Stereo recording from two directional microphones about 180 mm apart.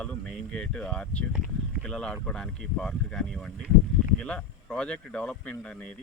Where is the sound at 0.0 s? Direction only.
5° left (ahead or behind).